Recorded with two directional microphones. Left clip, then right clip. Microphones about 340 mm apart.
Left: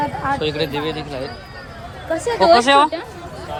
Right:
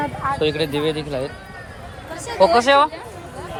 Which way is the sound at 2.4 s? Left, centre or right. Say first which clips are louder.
Left 1 dB; centre.